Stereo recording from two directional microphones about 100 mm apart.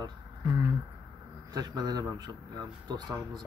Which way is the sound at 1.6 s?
40° right (ahead or behind).